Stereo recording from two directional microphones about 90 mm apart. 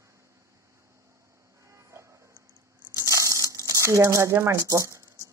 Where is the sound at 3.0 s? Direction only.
35° right (ahead or behind).